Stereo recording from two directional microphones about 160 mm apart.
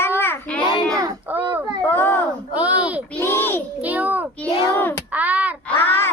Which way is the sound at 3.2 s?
15° left (ahead or behind).